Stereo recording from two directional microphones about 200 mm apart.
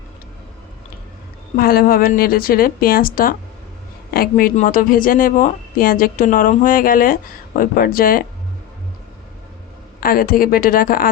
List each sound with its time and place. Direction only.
1.5 s speech: 45° left (ahead or behind)
10.0 s speech: 45° left (ahead or behind)